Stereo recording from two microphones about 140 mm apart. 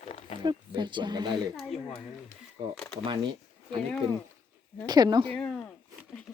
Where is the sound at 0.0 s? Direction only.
50° left (ahead or behind).